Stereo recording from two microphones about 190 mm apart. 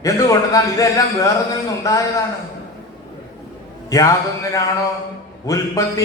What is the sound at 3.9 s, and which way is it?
Mantra, 15° left (ahead or behind).